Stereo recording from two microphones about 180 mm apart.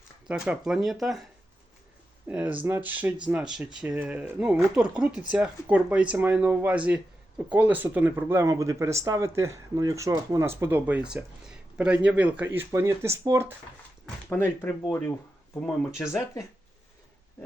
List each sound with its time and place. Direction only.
0.3 s speech: 5° right (ahead or behind)
14.3 s speech: 10° left (ahead or behind)
16.0 s speech: 15° left (ahead or behind)